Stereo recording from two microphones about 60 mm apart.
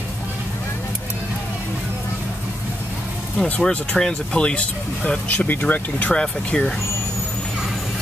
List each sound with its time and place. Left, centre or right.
3.4 s speech: centre
6.1 s speech: centre